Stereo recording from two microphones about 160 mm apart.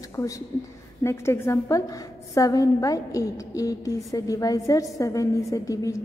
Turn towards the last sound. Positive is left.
turn(degrees=20)  # may be behind; listen again after turning